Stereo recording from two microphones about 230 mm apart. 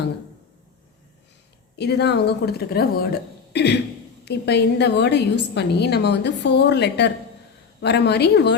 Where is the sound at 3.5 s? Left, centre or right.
Left.